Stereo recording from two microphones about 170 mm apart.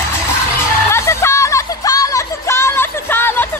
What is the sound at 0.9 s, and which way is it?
Music, 15° left (ahead or behind).